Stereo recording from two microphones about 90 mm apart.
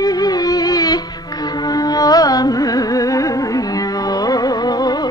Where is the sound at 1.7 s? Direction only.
45° left (ahead or behind).